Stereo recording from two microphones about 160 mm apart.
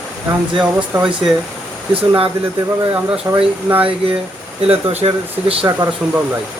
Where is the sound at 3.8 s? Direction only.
35° right (ahead or behind).